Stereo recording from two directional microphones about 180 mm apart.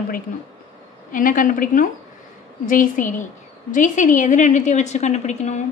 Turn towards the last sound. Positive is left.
turn(degrees=40)  # may be behind; listen again after turning